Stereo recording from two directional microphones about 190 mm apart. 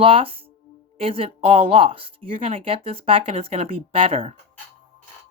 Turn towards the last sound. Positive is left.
turn(degrees=-30)  # may be behind; listen again after turning